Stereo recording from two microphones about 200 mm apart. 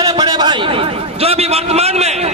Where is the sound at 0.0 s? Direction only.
20° right (ahead or behind).